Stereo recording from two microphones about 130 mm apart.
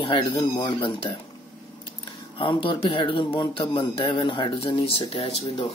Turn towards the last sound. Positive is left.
turn(degrees=50)  # may be behind; listen again after turning